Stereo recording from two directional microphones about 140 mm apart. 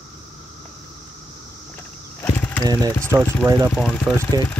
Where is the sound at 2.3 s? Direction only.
15° left (ahead or behind).